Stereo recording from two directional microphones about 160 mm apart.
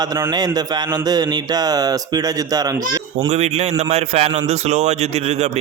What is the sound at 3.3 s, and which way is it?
A man's voice, 40° right (ahead or behind).